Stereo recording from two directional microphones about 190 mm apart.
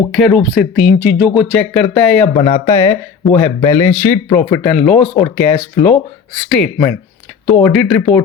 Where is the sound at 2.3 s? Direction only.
25° left (ahead or behind).